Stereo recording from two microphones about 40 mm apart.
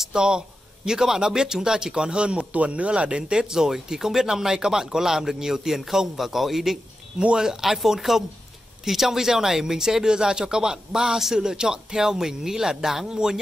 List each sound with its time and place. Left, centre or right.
0.0 s a sound: centre
0.8 s speech: centre
7.2 s speech: right